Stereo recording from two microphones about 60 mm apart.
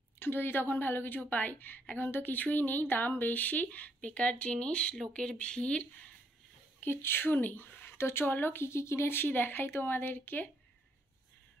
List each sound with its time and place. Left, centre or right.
0.2 s a woman's voice: left; by 5.9 s centre
6.8 s speech: left